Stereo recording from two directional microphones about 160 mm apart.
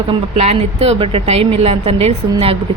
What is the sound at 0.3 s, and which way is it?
A woman's voice, 40° right (ahead or behind).